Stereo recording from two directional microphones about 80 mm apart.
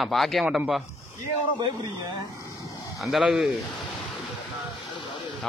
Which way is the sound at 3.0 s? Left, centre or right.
Centre.